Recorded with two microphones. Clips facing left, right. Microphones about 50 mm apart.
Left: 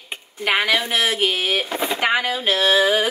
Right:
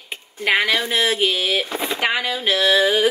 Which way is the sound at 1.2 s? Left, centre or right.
Left.